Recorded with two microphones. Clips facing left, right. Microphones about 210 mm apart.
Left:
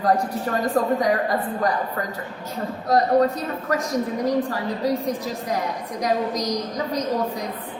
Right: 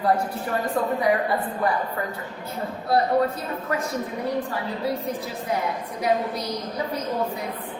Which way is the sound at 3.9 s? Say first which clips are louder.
Left 5 dB; 35° left (ahead or behind).